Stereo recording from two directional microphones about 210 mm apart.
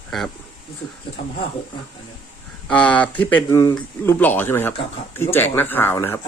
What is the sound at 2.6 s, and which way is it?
Speech, 5° left (ahead or behind).